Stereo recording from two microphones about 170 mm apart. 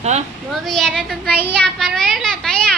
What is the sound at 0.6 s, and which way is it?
A child's voice, 5° left (ahead or behind).